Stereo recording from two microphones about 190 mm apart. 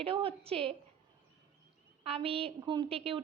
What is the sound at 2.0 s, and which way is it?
A woman's voice, 30° right (ahead or behind).